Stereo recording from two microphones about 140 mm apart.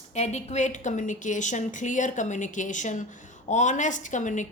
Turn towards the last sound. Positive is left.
turn(degrees=60)  # may be behind; listen again after turning